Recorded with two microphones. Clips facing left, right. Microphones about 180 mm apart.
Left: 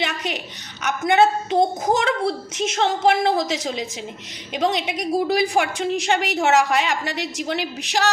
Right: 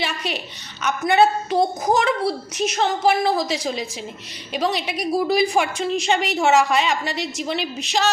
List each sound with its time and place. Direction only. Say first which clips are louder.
0.0 s a woman's voice: even; 20° left (ahead or behind)